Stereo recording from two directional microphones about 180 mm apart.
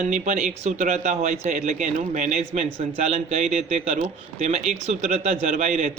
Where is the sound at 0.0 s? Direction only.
40° right (ahead or behind).